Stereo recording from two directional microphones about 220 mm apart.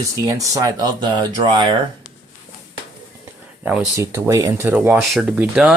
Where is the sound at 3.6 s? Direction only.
5° right (ahead or behind).